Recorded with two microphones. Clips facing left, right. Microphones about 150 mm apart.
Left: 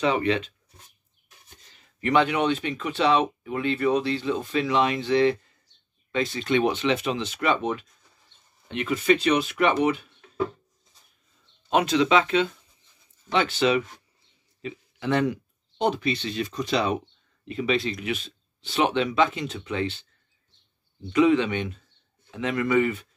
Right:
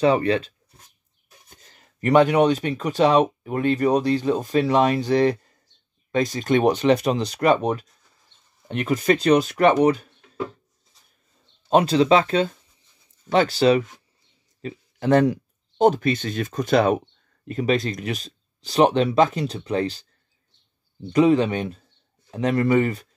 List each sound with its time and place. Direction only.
0.0 s speech: 35° right (ahead or behind)
1.7 s speech: 45° right (ahead or behind)
11.7 s a man's voice: 35° right (ahead or behind)
21.1 s speech: 40° right (ahead or behind)